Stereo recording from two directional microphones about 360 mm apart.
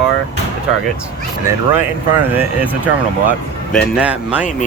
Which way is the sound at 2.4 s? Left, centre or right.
Centre.